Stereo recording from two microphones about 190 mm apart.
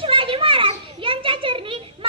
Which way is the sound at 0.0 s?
30° right (ahead or behind).